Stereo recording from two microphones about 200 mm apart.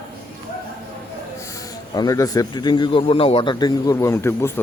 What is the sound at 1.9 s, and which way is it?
A man's voice, 20° left (ahead or behind).